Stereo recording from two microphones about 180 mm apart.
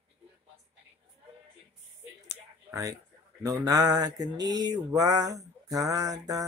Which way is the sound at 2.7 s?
20° right (ahead or behind).